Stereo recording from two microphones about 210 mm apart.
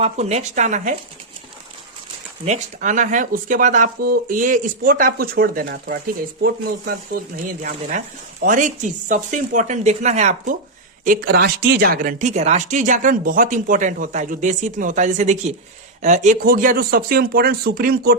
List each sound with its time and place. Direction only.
0.0 s speech: 30° right (ahead or behind)
2.4 s speech: 35° right (ahead or behind)
7.1 s speech: 45° right (ahead or behind)